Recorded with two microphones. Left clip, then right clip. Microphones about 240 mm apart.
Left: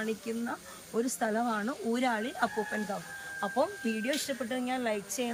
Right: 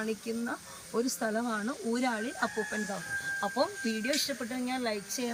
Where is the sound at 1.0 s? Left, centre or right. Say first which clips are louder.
Left 3 dB; centre.